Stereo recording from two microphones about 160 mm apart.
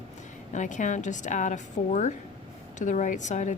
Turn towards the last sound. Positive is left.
turn(degrees=50)  # may be behind; listen again after turning